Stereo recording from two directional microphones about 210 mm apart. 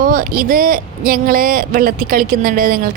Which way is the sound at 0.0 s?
40° right (ahead or behind).